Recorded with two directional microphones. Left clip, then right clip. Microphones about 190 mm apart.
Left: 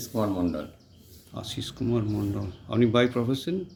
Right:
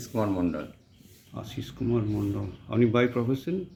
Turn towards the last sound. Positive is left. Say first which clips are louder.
# left 1 dB
turn(degrees=0)  # may be behind; listen again after turning